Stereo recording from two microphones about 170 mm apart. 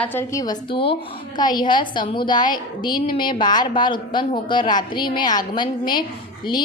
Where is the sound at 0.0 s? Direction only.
15° left (ahead or behind).